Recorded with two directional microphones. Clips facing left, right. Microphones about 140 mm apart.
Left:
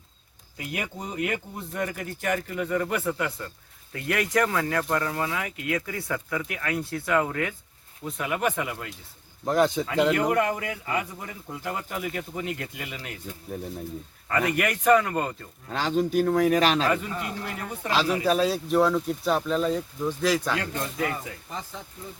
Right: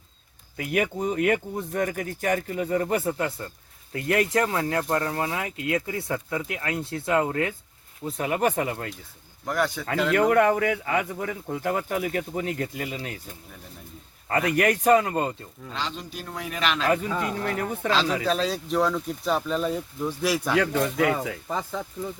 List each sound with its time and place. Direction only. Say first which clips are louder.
0.5 s a man's voice: right 8 dB; 60° right (ahead or behind); by 8.9 s 40° right (ahead or behind)
9.5 s speech: left 4 dB; 20° left (ahead or behind)
10.2 s speech: right 5 dB; 65° right (ahead or behind); by 13.1 s 40° right (ahead or behind)
14.5 s speech: right 2 dB; 35° right (ahead or behind)
15.7 s a man's voice: left 10 dB; 45° left (ahead or behind)
17.3 s speech: right 6 dB; 55° right (ahead or behind)
17.9 s speech: left 2 dB; 10° left (ahead or behind); by 20.6 s 10° right (ahead or behind)
20.6 s speech: right 7 dB; 90° right